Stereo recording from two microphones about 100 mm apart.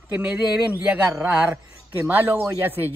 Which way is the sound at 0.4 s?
10° right (ahead or behind).